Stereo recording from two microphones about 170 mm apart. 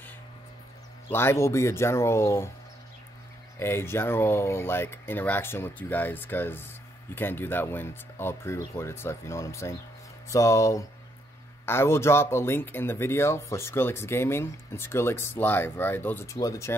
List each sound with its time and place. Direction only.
1.1 s speech: 15° left (ahead or behind)
3.5 s speech: 15° left (ahead or behind)